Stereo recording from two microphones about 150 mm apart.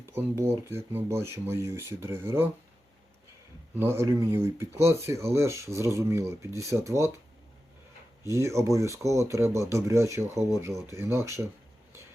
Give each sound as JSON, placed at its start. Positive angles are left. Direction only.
{"t": 0.0, "sound": "speech", "side_deg": -15}
{"t": 3.8, "sound": "speech", "side_deg": -15}
{"t": 8.3, "sound": "speech", "side_deg": -20}